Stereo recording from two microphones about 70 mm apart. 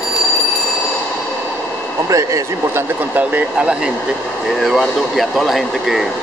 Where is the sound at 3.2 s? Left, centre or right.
Centre.